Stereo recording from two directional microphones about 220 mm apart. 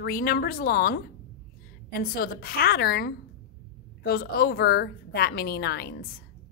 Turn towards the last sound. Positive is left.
turn(degrees=45)  # may be behind; listen again after turning